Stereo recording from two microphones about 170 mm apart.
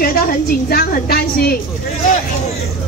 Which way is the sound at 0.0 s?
60° left (ahead or behind).